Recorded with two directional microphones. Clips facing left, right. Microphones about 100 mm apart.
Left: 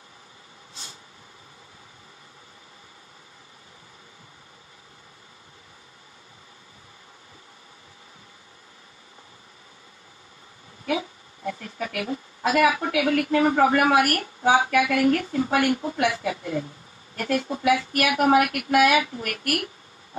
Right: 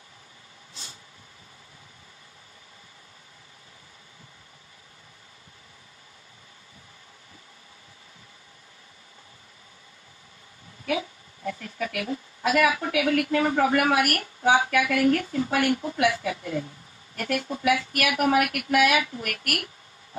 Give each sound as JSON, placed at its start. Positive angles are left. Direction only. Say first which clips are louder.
{"t": 10.9, "sound": "a woman's voice", "louder": "left 1 dB", "side_deg": 25}